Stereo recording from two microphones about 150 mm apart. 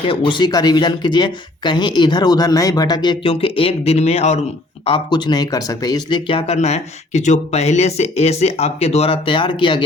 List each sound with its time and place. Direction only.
0.1 s speech: 30° left (ahead or behind)
4.9 s speech: 30° left (ahead or behind)